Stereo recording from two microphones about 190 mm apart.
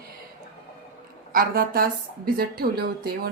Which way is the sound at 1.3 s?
50° right (ahead or behind).